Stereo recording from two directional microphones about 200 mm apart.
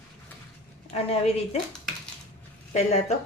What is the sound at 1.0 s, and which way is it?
Speech, 30° left (ahead or behind).